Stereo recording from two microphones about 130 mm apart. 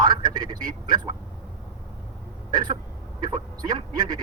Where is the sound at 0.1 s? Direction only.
30° right (ahead or behind).